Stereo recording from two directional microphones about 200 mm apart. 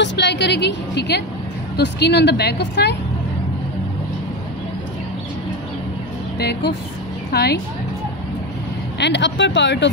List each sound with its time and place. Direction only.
0.0 s a woman's voice: 60° left (ahead or behind)
7.3 s speech: 55° left (ahead or behind)
9.0 s a woman's voice: 60° left (ahead or behind)